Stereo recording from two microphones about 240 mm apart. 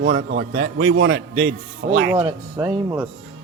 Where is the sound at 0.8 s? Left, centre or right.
Right.